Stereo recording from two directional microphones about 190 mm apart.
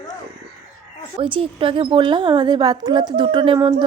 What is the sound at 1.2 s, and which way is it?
Speech, 30° right (ahead or behind).